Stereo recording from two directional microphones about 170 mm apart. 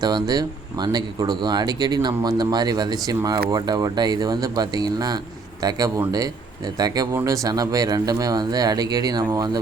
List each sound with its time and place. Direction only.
0.0 s speech: 25° right (ahead or behind)